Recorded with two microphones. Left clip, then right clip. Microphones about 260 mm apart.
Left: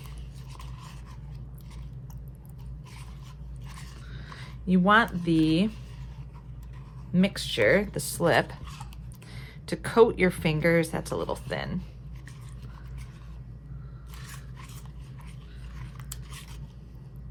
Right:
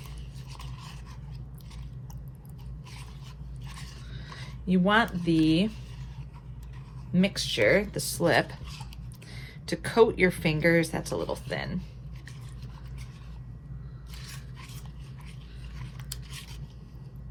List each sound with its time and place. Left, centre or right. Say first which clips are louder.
4.1 s a sound: left 1 dB; left
5.2 s speech: even; left
7.1 s speech: even; left
14.2 s scrape: even; centre